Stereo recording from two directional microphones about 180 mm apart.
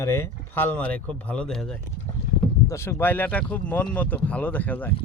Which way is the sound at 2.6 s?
15° left (ahead or behind).